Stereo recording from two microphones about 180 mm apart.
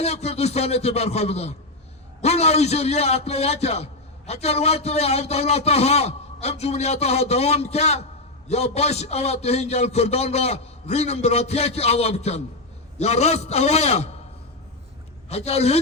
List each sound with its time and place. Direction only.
0.0 s a man's voice: 35° left (ahead or behind)
15.3 s a man's voice: 35° left (ahead or behind)